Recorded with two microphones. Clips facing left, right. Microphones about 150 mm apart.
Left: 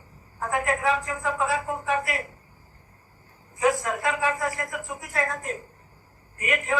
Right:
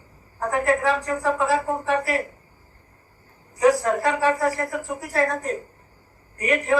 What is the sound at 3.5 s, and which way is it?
A woman's voice, 35° right (ahead or behind).